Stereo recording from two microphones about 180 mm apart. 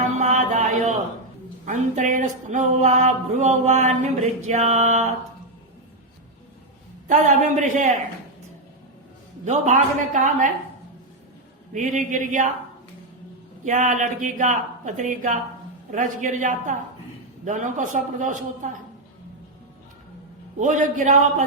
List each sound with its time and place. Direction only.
0.2 s a sound: 40° right (ahead or behind)
7.1 s speech: 45° right (ahead or behind)
9.4 s speech: 40° right (ahead or behind)
11.7 s speech: 45° right (ahead or behind)
13.7 s speech: 45° right (ahead or behind)
20.6 s speech: 45° right (ahead or behind)